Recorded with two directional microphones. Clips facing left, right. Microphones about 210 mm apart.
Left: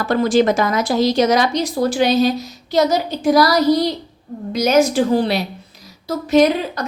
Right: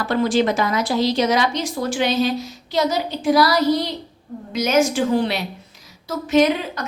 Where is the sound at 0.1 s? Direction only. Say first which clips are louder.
Left 4 dB; 45° left (ahead or behind).